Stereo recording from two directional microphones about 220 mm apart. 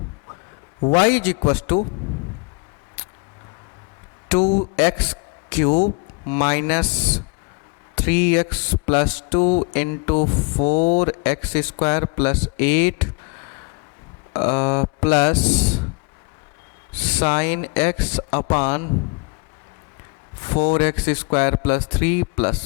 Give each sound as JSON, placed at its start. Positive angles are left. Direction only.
{"t": 0.8, "sound": "a man's voice", "side_deg": 30}
{"t": 1.0, "sound": "music", "side_deg": 10}
{"t": 4.4, "sound": "speech", "side_deg": 35}
{"t": 4.8, "sound": "a man's voice", "side_deg": 10}
{"t": 6.2, "sound": "music", "side_deg": 10}
{"t": 10.6, "sound": "speech", "side_deg": 35}
{"t": 11.0, "sound": "music", "side_deg": 10}
{"t": 12.0, "sound": "speech", "side_deg": 10}
{"t": 16.9, "sound": "music", "side_deg": 10}
{"t": 20.4, "sound": "music", "side_deg": 10}